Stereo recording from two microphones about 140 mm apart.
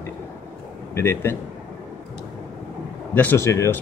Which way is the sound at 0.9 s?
20° left (ahead or behind).